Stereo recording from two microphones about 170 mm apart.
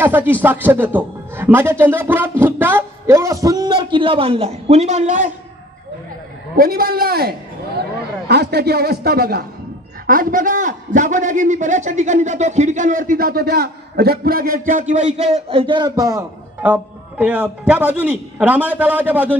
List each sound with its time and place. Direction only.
0.0 s a man's voice: 10° right (ahead or behind); by 5.3 s 45° right (ahead or behind)
6.5 s a man's voice: 60° right (ahead or behind)
10.0 s a man's voice: 55° right (ahead or behind); by 19.3 s 10° right (ahead or behind)